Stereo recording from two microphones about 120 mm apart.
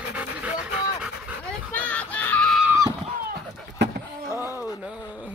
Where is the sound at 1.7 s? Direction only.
10° left (ahead or behind).